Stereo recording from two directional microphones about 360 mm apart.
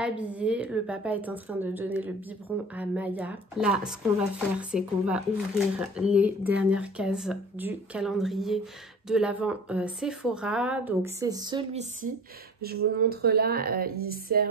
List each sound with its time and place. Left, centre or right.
0.0 s speech: centre; by 14.5 s right